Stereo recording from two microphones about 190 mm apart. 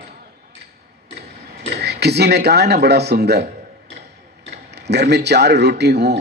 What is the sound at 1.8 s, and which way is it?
Speech, 60° right (ahead or behind).